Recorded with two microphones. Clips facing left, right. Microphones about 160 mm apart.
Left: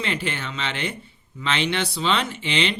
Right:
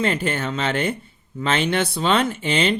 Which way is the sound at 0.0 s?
45° right (ahead or behind).